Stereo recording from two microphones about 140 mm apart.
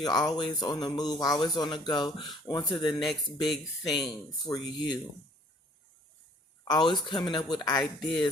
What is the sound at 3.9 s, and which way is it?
Speech, 30° left (ahead or behind).